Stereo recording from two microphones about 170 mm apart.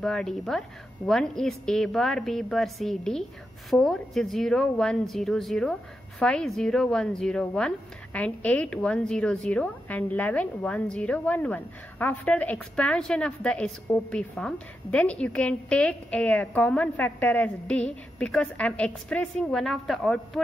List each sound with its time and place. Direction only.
0.0 s a woman's voice: 5° left (ahead or behind)